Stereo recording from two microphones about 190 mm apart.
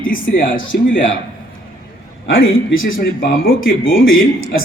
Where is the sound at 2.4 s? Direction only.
90° left.